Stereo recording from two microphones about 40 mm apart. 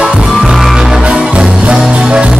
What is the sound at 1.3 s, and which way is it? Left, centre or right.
Music, right.